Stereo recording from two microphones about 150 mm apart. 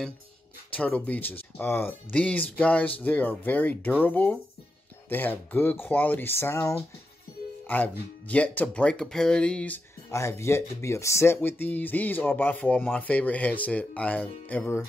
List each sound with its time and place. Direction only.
0.7 s speech: 10° left (ahead or behind)
10.1 s speech: 20° left (ahead or behind)